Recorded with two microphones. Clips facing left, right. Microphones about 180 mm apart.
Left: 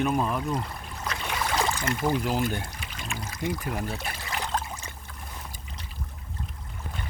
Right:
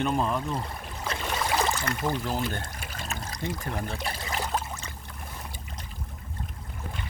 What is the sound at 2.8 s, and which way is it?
Pour, 45° right (ahead or behind).